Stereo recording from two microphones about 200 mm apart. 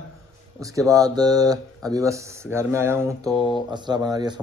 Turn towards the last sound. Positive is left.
turn(degrees=-20)  # may be behind; listen again after turning